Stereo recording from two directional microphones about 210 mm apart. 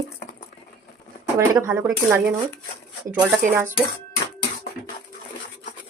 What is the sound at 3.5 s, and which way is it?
Speech, 10° right (ahead or behind).